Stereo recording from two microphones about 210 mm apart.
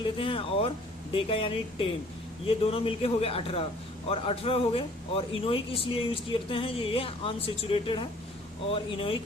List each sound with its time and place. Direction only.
0.0 s speech: 25° left (ahead or behind)